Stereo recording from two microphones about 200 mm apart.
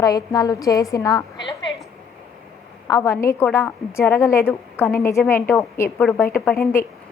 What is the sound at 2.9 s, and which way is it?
A woman's voice, 15° left (ahead or behind).